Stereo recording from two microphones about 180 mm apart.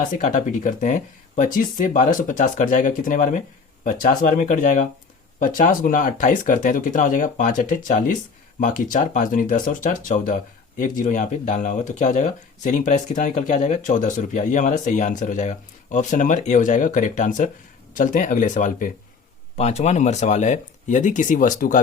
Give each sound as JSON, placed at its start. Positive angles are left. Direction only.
{"t": 0.0, "sound": "speech", "side_deg": 45}